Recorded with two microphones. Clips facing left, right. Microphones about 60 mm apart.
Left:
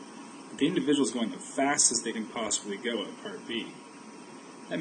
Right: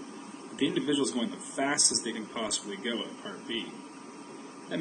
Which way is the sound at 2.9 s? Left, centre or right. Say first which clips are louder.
Left 2 dB; left.